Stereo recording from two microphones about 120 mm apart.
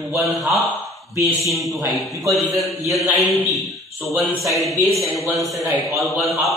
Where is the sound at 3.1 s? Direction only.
25° right (ahead or behind).